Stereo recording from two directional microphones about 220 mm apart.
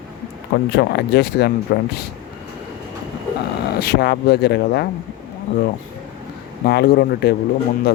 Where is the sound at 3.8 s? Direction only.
45° left (ahead or behind).